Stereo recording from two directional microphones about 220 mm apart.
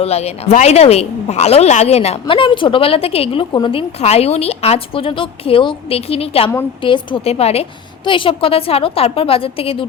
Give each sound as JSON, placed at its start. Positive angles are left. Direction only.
{"t": 0.0, "sound": "a woman's voice", "side_deg": 30}